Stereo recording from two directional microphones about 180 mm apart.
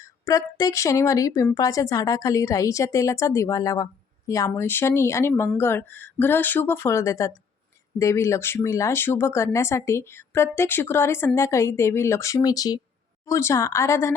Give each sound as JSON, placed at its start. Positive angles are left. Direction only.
{"t": 0.0, "sound": "speech", "side_deg": 20}